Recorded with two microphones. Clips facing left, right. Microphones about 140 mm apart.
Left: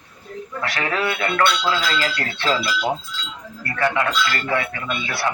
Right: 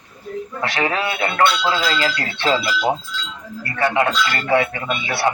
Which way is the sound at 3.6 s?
30° right (ahead or behind).